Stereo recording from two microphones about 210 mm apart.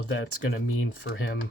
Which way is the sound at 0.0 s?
75° left (ahead or behind).